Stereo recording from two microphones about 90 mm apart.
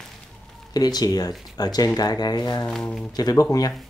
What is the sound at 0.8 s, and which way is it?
Speech, 45° left (ahead or behind).